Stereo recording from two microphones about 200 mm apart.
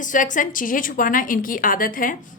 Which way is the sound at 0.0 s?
40° left (ahead or behind).